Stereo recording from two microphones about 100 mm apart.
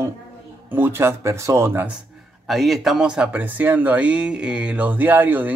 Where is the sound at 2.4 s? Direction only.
Centre (ahead or behind).